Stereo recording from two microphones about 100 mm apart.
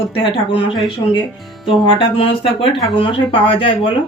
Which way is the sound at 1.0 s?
45° left (ahead or behind).